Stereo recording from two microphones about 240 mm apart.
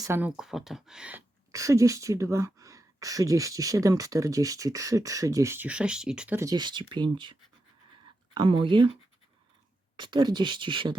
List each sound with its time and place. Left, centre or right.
0.0 s speech: centre
10.0 s speech: centre